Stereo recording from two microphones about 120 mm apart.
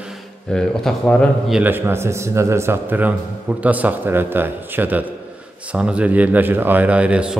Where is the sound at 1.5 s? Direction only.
15° right (ahead or behind).